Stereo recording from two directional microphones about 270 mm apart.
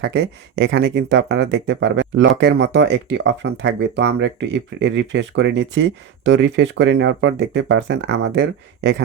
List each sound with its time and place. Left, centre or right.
0.0 s speech: right